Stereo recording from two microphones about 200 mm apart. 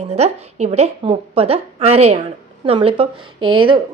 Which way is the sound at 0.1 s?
35° right (ahead or behind).